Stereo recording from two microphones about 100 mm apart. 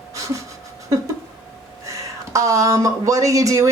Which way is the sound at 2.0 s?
30° right (ahead or behind).